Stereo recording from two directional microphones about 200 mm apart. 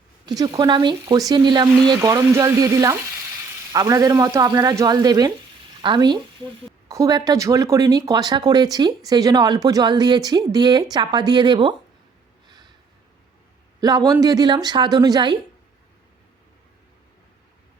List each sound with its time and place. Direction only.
0.3 s speech: 20° right (ahead or behind)
1.8 s frying: 20° right (ahead or behind)
3.7 s speech: 15° right (ahead or behind)
12.5 s a sound: 20° right (ahead or behind)
13.8 s speech: 20° right (ahead or behind)